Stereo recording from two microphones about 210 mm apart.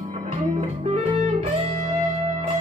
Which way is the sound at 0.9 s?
30° right (ahead or behind).